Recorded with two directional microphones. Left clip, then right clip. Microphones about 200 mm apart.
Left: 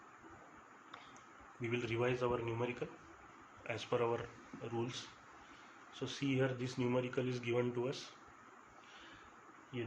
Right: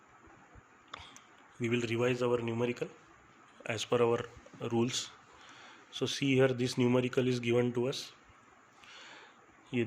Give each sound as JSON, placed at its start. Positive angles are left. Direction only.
{"t": 1.6, "sound": "speech", "side_deg": -60}